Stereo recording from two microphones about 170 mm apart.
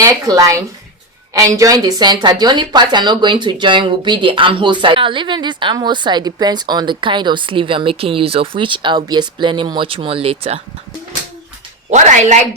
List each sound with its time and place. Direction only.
0.0 s a woman's voice: 20° right (ahead or behind); by 10.6 s 35° right (ahead or behind)
11.9 s speech: 45° right (ahead or behind)